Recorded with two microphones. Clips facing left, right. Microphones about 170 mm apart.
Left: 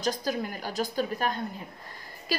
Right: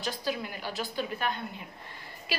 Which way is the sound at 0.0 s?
40° left (ahead or behind).